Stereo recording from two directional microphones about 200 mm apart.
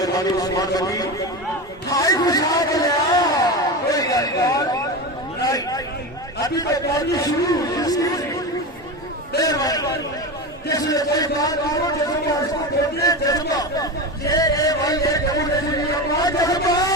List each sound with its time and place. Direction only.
0.0 s a man's voice: 20° left (ahead or behind)
1.9 s a sound: 15° left (ahead or behind)
5.4 s chatter: 20° left (ahead or behind)
6.4 s a man's voice: 20° left (ahead or behind)
9.4 s a man's voice: 20° left (ahead or behind)
13.0 s a man's voice: 15° left (ahead or behind)